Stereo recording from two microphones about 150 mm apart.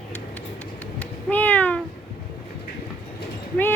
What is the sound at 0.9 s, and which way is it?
Cat, 10° left (ahead or behind).